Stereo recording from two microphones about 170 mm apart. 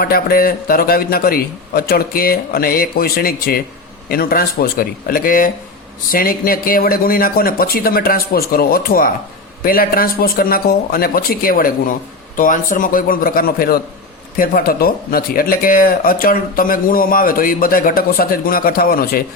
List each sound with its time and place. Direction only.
0.0 s speech: 60° left (ahead or behind)